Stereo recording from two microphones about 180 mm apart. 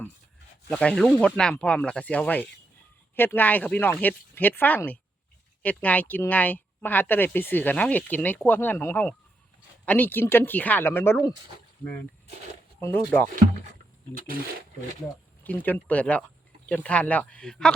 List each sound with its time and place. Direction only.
0.7 s speech: 5° left (ahead or behind)
12.8 s speech: 10° left (ahead or behind)
14.1 s speech: 50° right (ahead or behind)
15.4 s speech: 10° left (ahead or behind)